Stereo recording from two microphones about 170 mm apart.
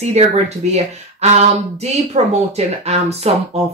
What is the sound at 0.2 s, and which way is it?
Speech, 40° right (ahead or behind).